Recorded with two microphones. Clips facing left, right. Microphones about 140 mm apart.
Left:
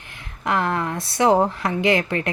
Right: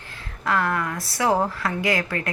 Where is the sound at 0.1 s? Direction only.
20° left (ahead or behind).